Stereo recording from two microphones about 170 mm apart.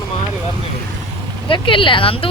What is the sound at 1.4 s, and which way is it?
Speech, 30° left (ahead or behind).